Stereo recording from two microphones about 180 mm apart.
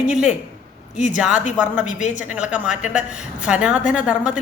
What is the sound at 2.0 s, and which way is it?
Speech, 45° left (ahead or behind).